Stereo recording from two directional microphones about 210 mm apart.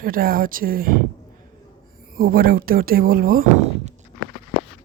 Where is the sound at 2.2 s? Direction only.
45° right (ahead or behind).